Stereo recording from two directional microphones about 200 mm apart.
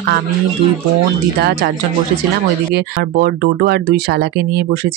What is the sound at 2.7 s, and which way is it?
Speech, 55° right (ahead or behind).